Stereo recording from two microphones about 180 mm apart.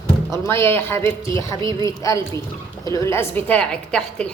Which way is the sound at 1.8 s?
15° left (ahead or behind).